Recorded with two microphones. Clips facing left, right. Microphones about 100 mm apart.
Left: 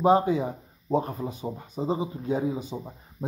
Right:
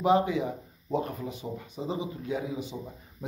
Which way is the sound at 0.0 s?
35° left (ahead or behind).